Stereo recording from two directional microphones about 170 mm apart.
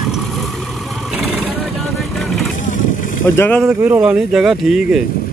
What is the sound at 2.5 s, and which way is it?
Vehicle, 50° left (ahead or behind).